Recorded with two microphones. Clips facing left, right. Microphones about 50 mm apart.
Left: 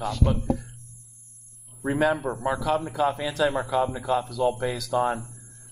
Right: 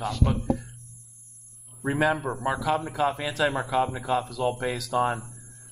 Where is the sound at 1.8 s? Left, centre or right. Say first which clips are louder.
Left 1 dB; centre.